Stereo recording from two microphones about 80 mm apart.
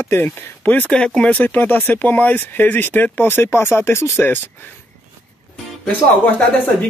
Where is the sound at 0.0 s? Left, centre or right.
Left.